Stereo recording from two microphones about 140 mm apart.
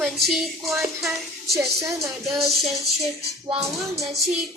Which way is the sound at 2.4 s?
Centre (ahead or behind).